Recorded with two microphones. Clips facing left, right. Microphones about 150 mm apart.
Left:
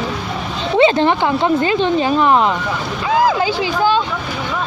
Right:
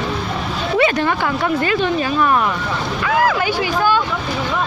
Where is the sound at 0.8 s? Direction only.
25° left (ahead or behind).